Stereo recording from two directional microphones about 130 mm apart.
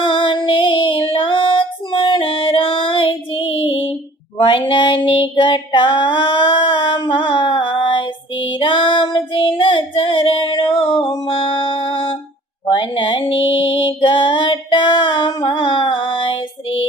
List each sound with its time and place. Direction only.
0.0 s female singing: 40° left (ahead or behind)
8.5 s child singing: 40° left (ahead or behind)
11.3 s music: 45° left (ahead or behind)
12.7 s female singing: 40° left (ahead or behind)
15.4 s music: 40° left (ahead or behind)